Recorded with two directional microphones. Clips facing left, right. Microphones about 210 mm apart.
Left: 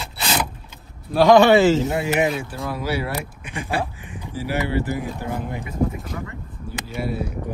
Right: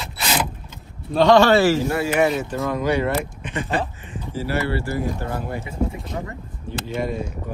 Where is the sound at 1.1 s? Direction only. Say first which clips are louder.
Left 1 dB; 10° left (ahead or behind).